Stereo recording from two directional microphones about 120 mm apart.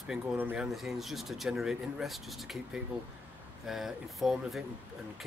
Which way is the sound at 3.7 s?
Centre (ahead or behind).